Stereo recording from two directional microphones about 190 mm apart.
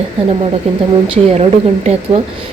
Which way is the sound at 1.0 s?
30° right (ahead or behind).